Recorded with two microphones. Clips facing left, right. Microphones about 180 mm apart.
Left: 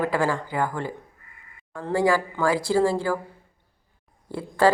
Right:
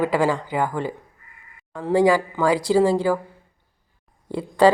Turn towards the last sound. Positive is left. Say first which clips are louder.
# right 5 dB
turn(degrees=-20)  # may be behind; listen again after turning